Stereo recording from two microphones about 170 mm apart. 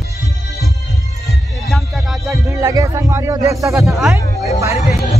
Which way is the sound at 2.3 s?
20° right (ahead or behind).